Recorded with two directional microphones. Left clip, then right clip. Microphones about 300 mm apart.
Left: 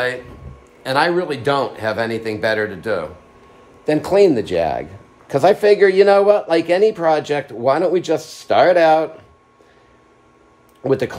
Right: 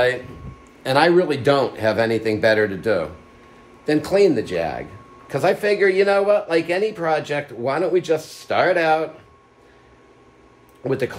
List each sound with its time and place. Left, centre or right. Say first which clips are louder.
0.8 s speech: right 1 dB; centre
3.8 s speech: left 3 dB; left
10.8 s speech: left 4 dB; left